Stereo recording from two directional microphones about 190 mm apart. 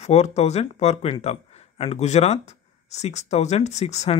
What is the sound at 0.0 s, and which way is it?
A man's voice, 35° left (ahead or behind).